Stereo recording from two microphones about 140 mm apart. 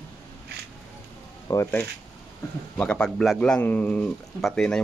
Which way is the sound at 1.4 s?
20° left (ahead or behind).